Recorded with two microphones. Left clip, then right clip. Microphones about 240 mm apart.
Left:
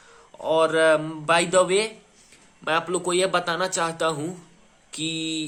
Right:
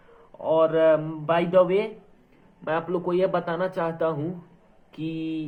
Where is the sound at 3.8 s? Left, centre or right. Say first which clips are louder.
Left 1 dB; left.